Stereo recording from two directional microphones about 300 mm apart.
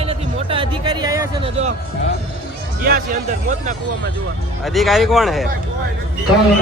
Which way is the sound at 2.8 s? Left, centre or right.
Right.